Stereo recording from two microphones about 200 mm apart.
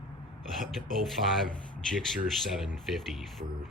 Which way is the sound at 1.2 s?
45° right (ahead or behind).